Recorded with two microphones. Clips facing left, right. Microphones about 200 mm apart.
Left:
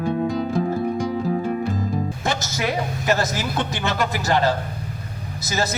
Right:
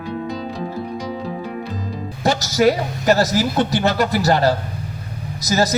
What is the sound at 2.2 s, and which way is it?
A man's voice, 40° right (ahead or behind).